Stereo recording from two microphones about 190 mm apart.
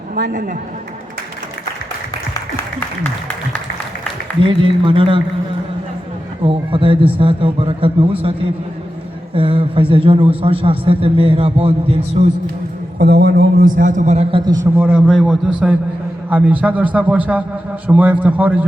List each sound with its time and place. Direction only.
0.2 s a man's voice: 50° right (ahead or behind)
4.4 s a man's voice: 25° right (ahead or behind)
6.4 s a man's voice: 30° right (ahead or behind)
13.0 s a man's voice: 60° right (ahead or behind); by 18.6 s 10° right (ahead or behind)